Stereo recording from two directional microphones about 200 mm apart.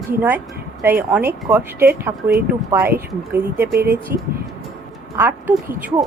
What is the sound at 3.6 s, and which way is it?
Speech, 50° right (ahead or behind).